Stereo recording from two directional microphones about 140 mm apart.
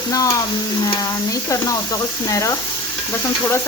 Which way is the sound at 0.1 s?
25° left (ahead or behind).